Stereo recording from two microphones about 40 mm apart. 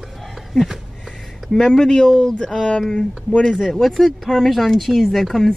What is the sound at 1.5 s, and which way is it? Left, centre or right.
Speech, centre.